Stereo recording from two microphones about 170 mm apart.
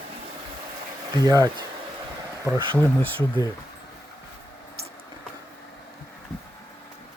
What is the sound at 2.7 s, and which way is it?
Speech, 10° left (ahead or behind).